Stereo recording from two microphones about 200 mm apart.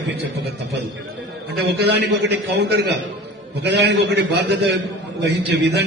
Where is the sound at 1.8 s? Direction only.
60° right (ahead or behind).